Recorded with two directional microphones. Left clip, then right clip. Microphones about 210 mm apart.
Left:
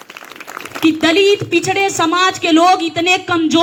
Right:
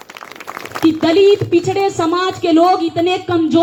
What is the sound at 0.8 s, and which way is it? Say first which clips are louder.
Speech: right 1 dB; 25° left (ahead or behind).